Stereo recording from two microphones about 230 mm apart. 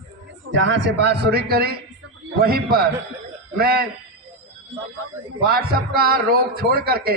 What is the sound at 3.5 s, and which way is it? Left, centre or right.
Speech, right.